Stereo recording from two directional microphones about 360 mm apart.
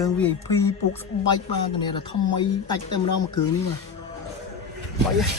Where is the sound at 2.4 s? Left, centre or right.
Centre.